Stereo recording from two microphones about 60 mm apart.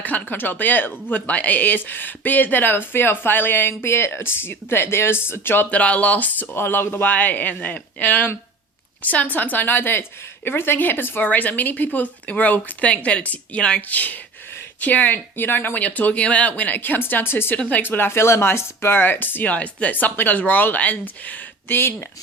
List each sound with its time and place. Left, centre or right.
0.0 s speech: left
5.7 s speech: left
17.6 s speech: left